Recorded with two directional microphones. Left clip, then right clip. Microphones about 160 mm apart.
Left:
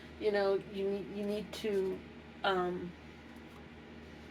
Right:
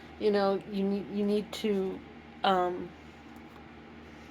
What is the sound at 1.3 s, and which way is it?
Speech, 55° right (ahead or behind).